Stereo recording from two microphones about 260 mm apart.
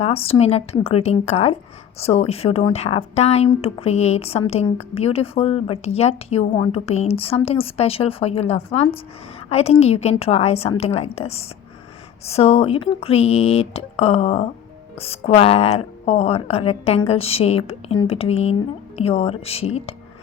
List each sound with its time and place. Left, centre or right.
0.0 s speech: left